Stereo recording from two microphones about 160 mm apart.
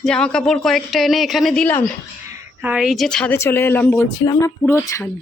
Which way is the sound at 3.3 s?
15° left (ahead or behind).